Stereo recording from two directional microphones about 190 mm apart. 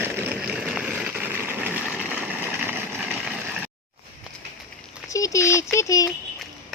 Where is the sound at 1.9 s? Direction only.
5° right (ahead or behind).